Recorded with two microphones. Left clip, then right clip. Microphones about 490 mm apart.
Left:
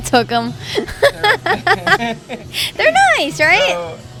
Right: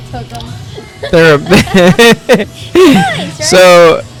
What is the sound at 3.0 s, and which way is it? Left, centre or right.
Speech, left.